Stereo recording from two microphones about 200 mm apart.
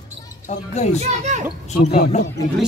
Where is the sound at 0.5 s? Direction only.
35° left (ahead or behind).